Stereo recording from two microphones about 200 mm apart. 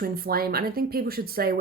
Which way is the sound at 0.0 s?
50° right (ahead or behind).